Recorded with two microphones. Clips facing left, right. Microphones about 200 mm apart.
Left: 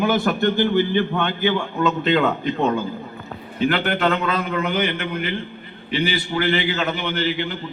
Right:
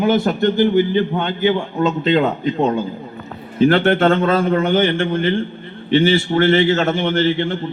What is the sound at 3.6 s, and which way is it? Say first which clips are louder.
A man's voice: right 7 dB; 45° right (ahead or behind).